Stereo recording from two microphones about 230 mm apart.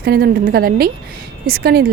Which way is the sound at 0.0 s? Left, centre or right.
Right.